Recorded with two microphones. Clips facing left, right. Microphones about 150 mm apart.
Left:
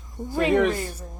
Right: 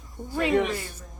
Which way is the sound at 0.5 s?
45° left (ahead or behind).